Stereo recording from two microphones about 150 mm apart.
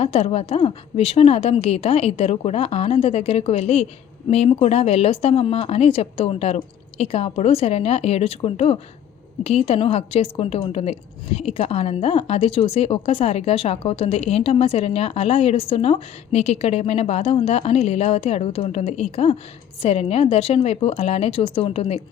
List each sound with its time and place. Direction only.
0.0 s a woman's voice: 40° left (ahead or behind)